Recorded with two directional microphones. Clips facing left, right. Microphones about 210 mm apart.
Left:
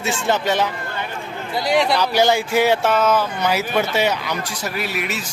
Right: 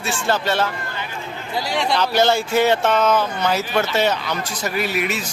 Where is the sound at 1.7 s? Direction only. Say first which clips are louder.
Left 3 dB; 5° left (ahead or behind).